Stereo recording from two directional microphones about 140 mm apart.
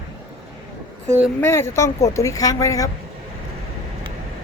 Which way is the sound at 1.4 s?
15° left (ahead or behind).